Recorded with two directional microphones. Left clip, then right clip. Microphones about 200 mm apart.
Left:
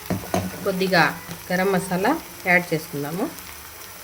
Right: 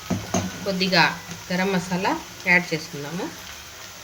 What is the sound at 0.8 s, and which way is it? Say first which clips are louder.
Speech: even; 40° left (ahead or behind).